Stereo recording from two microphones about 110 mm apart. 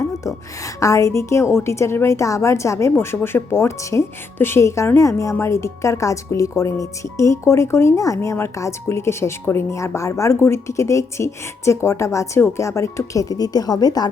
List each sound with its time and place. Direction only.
0.8 s speech: 30° left (ahead or behind)